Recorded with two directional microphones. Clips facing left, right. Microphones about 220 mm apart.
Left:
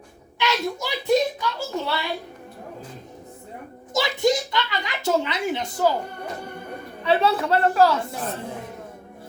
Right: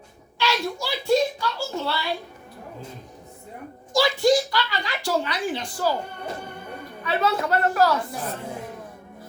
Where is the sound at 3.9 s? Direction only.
20° left (ahead or behind).